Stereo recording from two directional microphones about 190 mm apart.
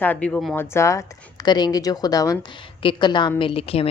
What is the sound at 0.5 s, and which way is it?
Speech, 15° left (ahead or behind).